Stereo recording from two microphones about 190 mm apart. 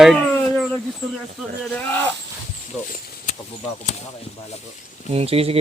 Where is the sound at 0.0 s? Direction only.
Centre (ahead or behind).